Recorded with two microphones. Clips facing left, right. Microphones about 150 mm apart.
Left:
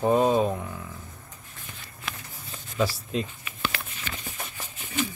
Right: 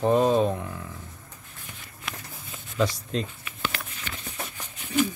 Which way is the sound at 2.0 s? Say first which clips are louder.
Even; centre (ahead or behind).